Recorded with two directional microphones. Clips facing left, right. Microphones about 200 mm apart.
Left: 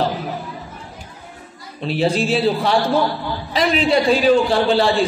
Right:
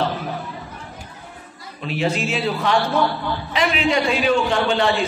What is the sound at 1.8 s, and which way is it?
A man's voice, 35° left (ahead or behind).